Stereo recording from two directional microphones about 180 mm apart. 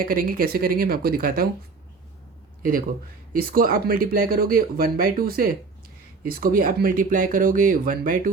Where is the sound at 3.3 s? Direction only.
50° right (ahead or behind).